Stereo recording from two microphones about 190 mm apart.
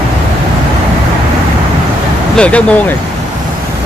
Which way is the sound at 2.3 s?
5° left (ahead or behind).